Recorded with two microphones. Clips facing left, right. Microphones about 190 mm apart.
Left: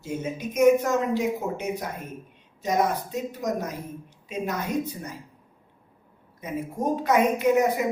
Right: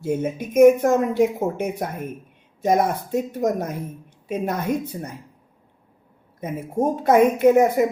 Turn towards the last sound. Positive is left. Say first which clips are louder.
# right 6 dB
turn(degrees=-50)  # may be behind; listen again after turning